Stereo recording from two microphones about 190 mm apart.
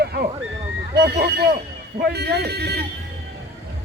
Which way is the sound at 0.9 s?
60° right (ahead or behind).